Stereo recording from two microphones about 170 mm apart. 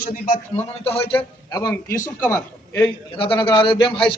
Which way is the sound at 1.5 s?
20° left (ahead or behind).